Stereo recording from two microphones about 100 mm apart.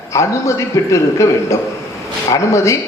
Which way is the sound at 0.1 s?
30° left (ahead or behind).